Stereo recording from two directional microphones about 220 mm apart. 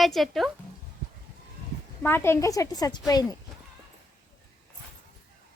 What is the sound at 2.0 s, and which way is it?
Speech, 10° left (ahead or behind).